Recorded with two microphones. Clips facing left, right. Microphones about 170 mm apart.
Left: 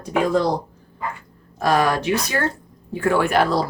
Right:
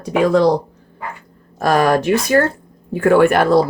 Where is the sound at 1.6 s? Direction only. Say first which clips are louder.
Right 4 dB; 50° right (ahead or behind).